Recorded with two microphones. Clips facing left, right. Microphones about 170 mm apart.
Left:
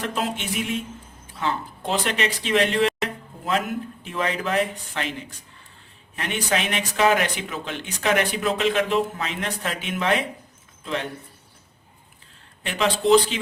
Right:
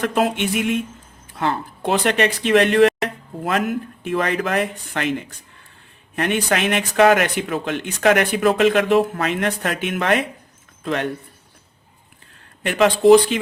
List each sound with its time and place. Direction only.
0.0 s speech: 60° right (ahead or behind)
6.1 s speech: 60° right (ahead or behind)
12.6 s speech: 55° right (ahead or behind)